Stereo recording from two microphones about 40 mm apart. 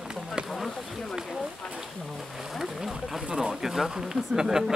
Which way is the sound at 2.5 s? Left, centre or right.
Centre.